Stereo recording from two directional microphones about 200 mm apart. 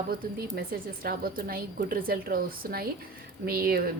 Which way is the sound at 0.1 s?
50° right (ahead or behind).